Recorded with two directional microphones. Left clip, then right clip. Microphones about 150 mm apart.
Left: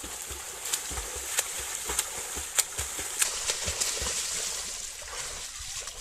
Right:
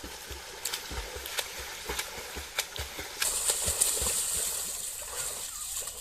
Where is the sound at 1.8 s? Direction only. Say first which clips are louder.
Left 1 dB; 35° left (ahead or behind).